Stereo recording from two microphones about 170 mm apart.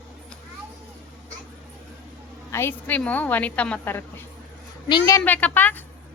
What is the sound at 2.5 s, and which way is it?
Speech, 15° left (ahead or behind).